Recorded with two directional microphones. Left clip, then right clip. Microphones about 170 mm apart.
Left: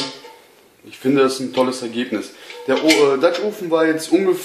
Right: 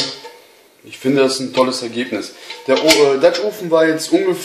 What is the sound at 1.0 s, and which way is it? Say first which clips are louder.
Speech: right 1 dB; 25° left (ahead or behind).